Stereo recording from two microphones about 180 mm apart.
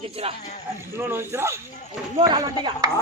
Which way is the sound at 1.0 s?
10° right (ahead or behind).